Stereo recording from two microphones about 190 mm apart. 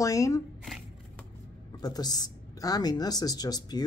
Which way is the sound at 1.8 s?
20° left (ahead or behind).